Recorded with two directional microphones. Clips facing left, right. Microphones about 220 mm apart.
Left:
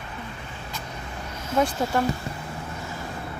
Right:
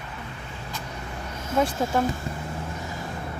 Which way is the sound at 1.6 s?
Centre (ahead or behind).